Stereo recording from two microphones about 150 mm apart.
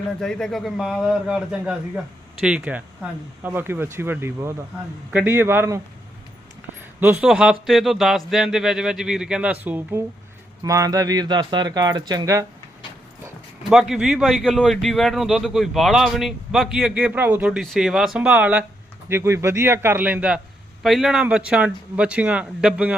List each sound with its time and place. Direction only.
0.2 s a man's voice: 5° left (ahead or behind); by 5.8 s 15° right (ahead or behind)
7.0 s a man's voice: 10° right (ahead or behind)
10.6 s speech: 20° right (ahead or behind)
13.7 s a man's voice: 5° right (ahead or behind)